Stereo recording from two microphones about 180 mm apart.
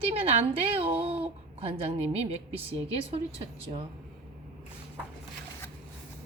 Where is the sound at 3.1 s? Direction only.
35° right (ahead or behind).